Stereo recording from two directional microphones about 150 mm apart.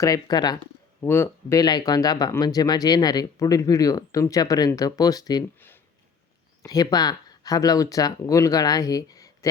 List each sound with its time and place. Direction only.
0.0 s speech: 25° left (ahead or behind)
1.0 s speech: 15° left (ahead or behind)
6.6 s speech: 25° left (ahead or behind)